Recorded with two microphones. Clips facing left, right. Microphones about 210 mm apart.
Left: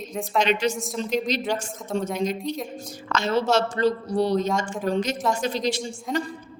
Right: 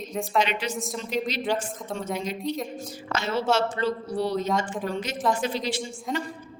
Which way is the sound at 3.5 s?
40° left (ahead or behind).